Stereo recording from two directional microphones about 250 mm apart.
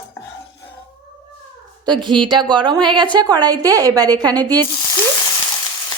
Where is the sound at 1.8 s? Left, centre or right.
Centre.